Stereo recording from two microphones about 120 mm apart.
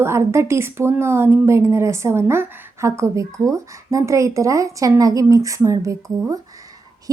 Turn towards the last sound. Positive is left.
turn(degrees=-30)  # may be behind; listen again after turning